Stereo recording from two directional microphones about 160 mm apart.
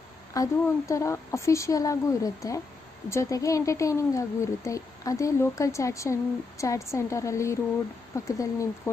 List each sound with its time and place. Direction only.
0.3 s speech: 20° left (ahead or behind)